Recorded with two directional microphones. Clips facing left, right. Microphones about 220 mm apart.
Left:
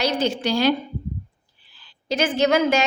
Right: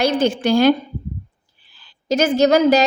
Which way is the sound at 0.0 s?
50° right (ahead or behind).